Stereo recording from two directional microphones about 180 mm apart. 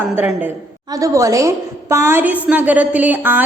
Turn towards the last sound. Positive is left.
turn(degrees=-10)  # may be behind; listen again after turning